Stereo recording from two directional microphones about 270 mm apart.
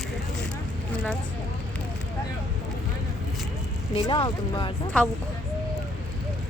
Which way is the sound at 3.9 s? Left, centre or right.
Centre.